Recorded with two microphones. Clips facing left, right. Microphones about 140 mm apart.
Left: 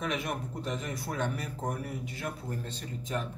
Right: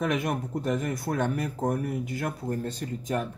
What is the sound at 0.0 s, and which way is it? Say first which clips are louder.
Speech: right 6 dB; 45° right (ahead or behind).